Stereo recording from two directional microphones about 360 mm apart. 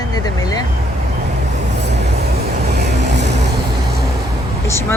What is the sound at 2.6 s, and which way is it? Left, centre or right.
Vehicle, right.